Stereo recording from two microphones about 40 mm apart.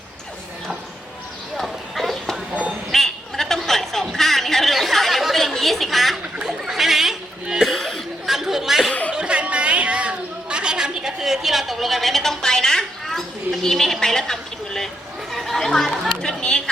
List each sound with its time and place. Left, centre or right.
1.5 s clip-clop: centre
2.9 s a sound: centre
7.4 s cough: centre
7.7 s cough: centre
8.9 s a sound: left
9.1 s chatter: right; by 14.8 s centre
15.3 s chatter: centre